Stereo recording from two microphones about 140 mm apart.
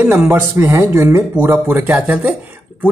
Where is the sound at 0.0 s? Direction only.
20° right (ahead or behind).